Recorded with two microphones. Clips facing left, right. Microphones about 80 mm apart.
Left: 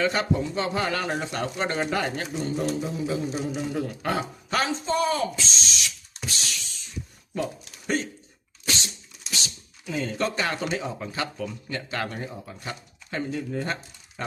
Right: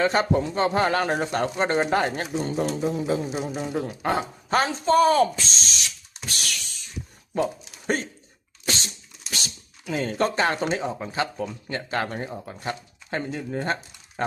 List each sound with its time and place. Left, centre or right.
0.0 s speech: right
0.3 s speech: right
2.4 s speech: right
3.8 s speech: right
6.2 s drum kit: right
7.3 s speech: right
8.6 s sneeze: right
9.3 s speech: right